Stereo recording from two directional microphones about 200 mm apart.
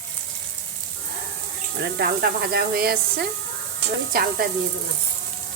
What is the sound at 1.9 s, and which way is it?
Speech, 50° right (ahead or behind).